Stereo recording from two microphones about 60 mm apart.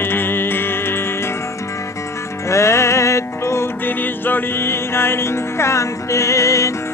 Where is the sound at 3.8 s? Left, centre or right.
Left.